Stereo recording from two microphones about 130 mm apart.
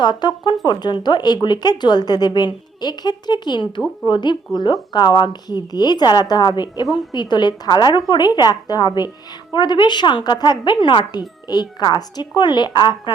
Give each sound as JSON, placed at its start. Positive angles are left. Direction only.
{"t": 0.0, "sound": "speech", "side_deg": 35}